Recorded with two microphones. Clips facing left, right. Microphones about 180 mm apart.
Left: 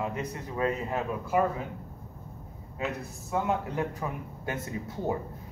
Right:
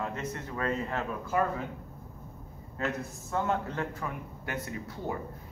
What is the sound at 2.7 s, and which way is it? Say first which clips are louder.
A man's voice: even; 10° left (ahead or behind).